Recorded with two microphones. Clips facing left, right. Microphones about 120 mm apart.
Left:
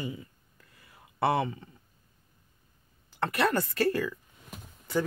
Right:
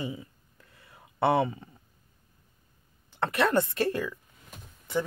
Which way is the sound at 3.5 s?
25° right (ahead or behind).